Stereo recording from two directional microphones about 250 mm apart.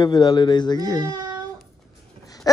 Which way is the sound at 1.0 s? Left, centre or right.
Centre.